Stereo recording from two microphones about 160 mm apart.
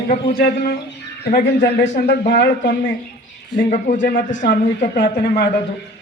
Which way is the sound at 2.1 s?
90° left.